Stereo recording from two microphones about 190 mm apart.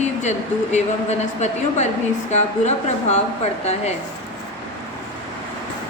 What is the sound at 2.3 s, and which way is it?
Speech, 35° left (ahead or behind).